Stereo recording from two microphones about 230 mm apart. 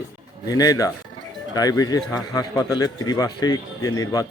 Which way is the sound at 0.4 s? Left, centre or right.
Centre.